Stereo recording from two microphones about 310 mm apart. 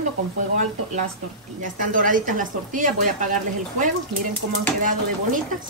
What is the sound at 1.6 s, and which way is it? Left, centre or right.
Speech, right.